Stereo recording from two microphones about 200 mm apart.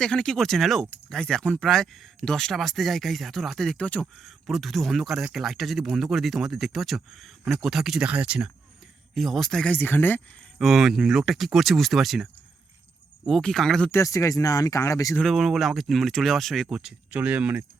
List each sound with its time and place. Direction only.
0.0 s speech: 5° left (ahead or behind)
10.6 s speech: centre (ahead or behind)
14.0 s speech: 15° left (ahead or behind)
15.2 s speech: centre (ahead or behind)